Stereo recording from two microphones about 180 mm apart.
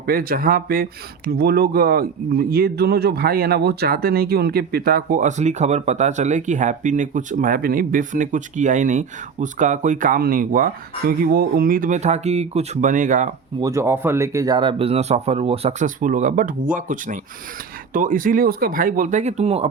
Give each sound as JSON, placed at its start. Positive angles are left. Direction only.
{"t": 0.0, "sound": "speech", "side_deg": -55}
{"t": 13.6, "sound": "speech", "side_deg": -15}